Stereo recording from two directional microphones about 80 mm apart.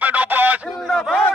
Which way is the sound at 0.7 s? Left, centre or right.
Centre.